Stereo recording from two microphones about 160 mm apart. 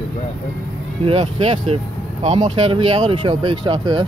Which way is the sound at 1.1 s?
40° right (ahead or behind).